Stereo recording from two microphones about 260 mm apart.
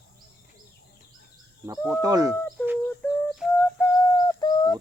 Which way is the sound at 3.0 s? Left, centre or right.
Centre.